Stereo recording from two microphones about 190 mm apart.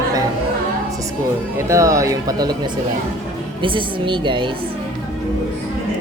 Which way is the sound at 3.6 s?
25° right (ahead or behind).